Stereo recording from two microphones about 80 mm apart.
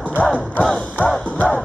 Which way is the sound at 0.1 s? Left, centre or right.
Centre.